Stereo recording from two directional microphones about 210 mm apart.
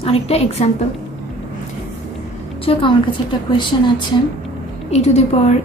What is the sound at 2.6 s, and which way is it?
A woman's voice, 25° left (ahead or behind).